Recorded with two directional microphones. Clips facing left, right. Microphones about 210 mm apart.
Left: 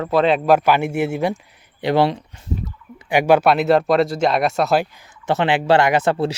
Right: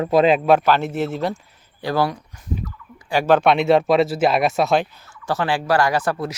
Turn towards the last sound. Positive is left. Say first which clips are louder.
# left 4 dB
turn(degrees=25)  # may be behind; listen again after turning